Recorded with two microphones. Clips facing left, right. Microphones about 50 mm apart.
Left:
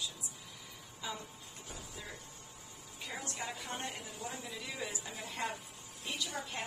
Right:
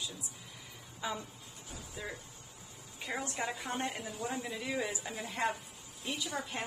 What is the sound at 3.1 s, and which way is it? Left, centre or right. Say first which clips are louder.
A woman's voice: right 5 dB; right.